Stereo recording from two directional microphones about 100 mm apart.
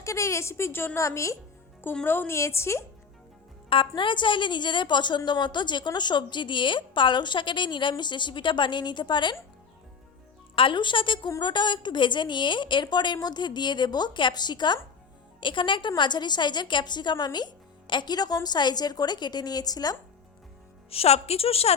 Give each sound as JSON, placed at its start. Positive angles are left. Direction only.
{"t": 0.0, "sound": "a woman's voice", "side_deg": 30}
{"t": 3.7, "sound": "a woman's voice", "side_deg": 55}
{"t": 10.5, "sound": "a woman's voice", "side_deg": 60}
{"t": 20.9, "sound": "a woman's voice", "side_deg": 85}